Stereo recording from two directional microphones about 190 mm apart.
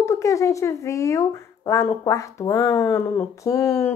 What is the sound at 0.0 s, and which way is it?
Speech, 15° left (ahead or behind).